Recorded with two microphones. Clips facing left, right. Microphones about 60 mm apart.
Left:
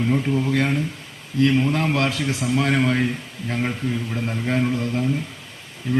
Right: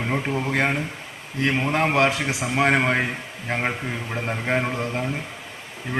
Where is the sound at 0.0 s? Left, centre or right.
Right.